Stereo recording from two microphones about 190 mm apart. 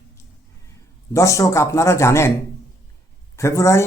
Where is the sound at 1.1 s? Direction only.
15° left (ahead or behind).